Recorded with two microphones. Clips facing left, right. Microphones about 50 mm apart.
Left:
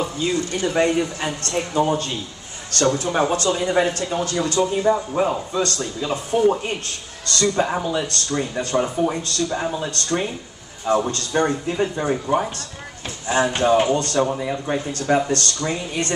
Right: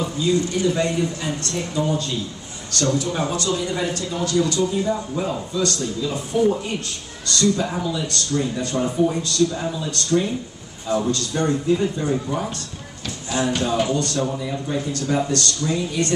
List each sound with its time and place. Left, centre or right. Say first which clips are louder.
0.0 s speech: right 2 dB; left